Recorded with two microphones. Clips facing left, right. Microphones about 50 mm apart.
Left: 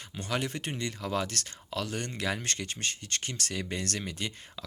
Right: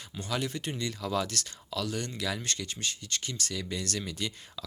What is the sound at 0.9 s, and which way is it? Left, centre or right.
Speech, left.